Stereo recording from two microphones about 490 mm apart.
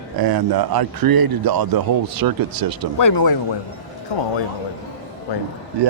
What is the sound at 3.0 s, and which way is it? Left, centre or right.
Speech, left.